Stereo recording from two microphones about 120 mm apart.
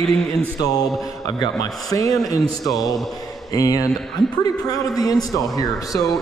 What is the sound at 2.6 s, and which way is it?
Mantra, 30° left (ahead or behind).